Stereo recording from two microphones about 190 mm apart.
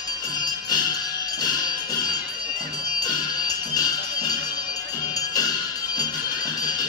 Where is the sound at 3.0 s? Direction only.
20° left (ahead or behind).